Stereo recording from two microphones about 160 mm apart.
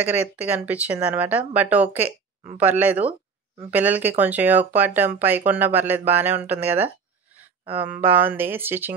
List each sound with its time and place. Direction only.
0.0 s speech: 10° right (ahead or behind)
7.6 s speech: 35° right (ahead or behind)
7.9 s speech: 15° right (ahead or behind)